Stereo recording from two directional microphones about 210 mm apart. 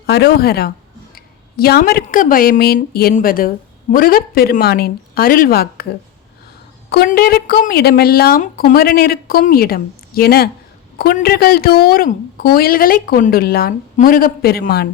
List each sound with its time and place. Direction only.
0.0 s a woman's voice: 50° left (ahead or behind)
6.9 s a woman's voice: 45° left (ahead or behind)